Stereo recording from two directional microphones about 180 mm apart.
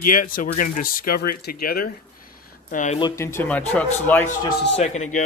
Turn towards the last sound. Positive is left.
turn(degrees=40)  # may be behind; listen again after turning